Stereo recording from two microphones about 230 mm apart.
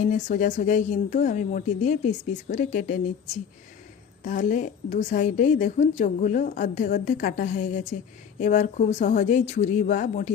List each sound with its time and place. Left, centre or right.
0.1 s a woman's voice: left
4.2 s a woman's voice: left